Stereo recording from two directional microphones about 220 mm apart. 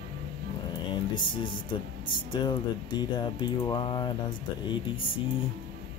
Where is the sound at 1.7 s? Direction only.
20° left (ahead or behind).